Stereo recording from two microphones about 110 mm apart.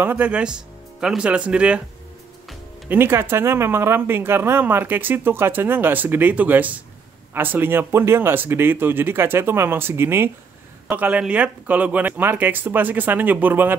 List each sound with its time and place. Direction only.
0.0 s speech: 15° right (ahead or behind)
2.9 s speech: 20° right (ahead or behind)